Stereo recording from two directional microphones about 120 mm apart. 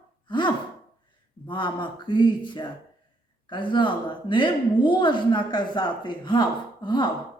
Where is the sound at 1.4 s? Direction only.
40° left (ahead or behind).